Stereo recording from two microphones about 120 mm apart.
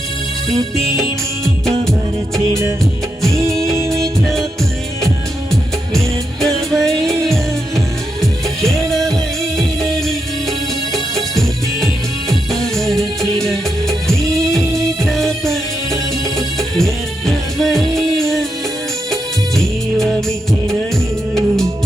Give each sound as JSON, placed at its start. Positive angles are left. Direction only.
{"t": 1.8, "sound": "music", "side_deg": 5}
{"t": 2.5, "sound": "music", "side_deg": -25}
{"t": 3.8, "sound": "music", "side_deg": -25}
{"t": 6.4, "sound": "music", "side_deg": 0}
{"t": 8.2, "sound": "music", "side_deg": 0}
{"t": 21.3, "sound": "music", "side_deg": 5}